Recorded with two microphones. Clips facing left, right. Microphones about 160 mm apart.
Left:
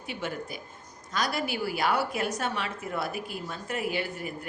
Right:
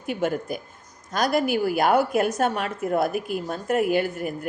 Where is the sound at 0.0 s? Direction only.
50° right (ahead or behind).